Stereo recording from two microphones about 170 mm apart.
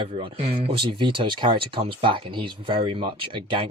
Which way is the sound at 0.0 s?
35° right (ahead or behind).